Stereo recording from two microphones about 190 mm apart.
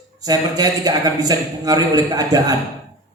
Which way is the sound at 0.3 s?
20° right (ahead or behind).